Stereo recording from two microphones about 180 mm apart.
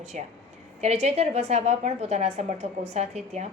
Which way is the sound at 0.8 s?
35° right (ahead or behind).